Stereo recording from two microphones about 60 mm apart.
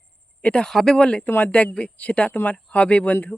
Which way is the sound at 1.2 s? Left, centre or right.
Left.